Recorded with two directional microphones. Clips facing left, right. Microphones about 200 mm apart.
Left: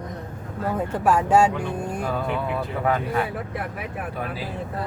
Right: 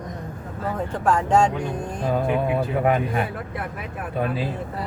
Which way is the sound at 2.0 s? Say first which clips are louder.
Right 7 dB; 20° right (ahead or behind).